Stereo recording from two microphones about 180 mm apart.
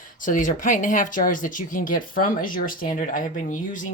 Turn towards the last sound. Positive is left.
turn(degrees=45)  # may be behind; listen again after turning